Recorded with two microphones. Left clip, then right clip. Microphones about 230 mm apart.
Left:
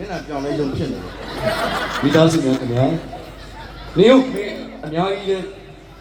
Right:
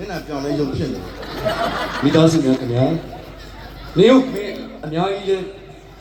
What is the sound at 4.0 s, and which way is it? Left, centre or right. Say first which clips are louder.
Speech: even; right.